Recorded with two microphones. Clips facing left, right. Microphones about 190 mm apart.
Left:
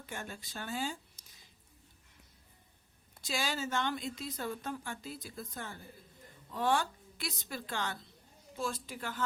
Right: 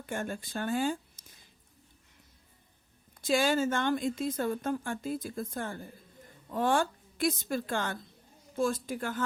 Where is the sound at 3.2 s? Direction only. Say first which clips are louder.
Right 10 dB; 50° right (ahead or behind).